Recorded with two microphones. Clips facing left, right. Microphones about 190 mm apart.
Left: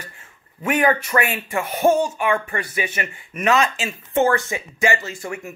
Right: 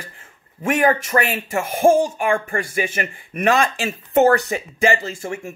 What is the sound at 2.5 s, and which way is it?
Speech, 50° right (ahead or behind).